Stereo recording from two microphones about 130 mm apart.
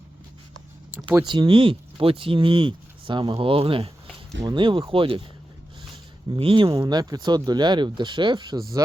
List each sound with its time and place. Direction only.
1.2 s speech: 35° right (ahead or behind)
6.3 s speech: 40° right (ahead or behind)